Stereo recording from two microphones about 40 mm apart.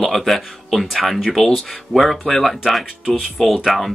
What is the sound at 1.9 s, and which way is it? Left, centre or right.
Speech, centre.